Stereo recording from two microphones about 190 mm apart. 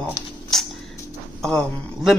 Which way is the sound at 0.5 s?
Centre (ahead or behind).